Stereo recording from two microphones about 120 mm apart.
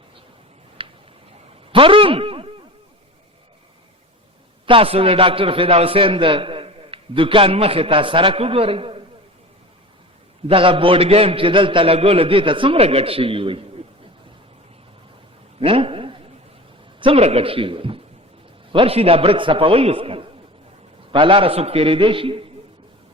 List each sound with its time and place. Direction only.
0.8 s tick-tock: 45° right (ahead or behind)
1.7 s a sound: 45° right (ahead or behind)
4.6 s a man's voice: 50° right (ahead or behind)
10.4 s a man's voice: 50° right (ahead or behind)
15.6 s a man's voice: 50° right (ahead or behind)